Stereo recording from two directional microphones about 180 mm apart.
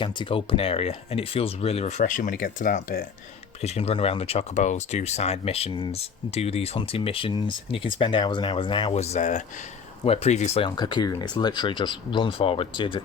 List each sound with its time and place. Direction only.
0.0 s speech: 25° left (ahead or behind); by 3.1 s 50° left (ahead or behind)
3.6 s speech: 35° left (ahead or behind)
10.7 s speech: 25° left (ahead or behind)